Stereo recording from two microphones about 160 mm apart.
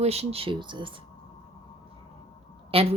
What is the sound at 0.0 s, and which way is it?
Speech, 40° right (ahead or behind).